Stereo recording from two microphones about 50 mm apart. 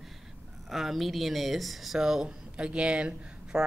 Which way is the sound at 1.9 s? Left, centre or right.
Centre.